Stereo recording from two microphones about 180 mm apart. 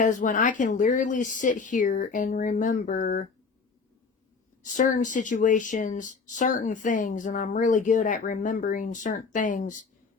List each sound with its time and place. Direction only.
0.0 s speech: 45° left (ahead or behind)
4.6 s speech: 45° left (ahead or behind)